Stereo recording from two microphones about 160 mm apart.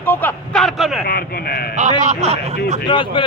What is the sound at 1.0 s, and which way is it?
Speech, 75° left (ahead or behind).